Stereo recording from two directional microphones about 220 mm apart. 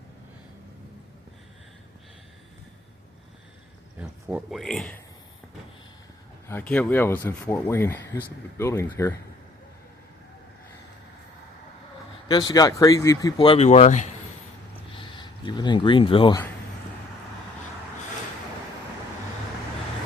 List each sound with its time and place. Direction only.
4.0 s speech: 5° right (ahead or behind)
6.5 s speech: 5° left (ahead or behind)
12.3 s speech: 20° left (ahead or behind)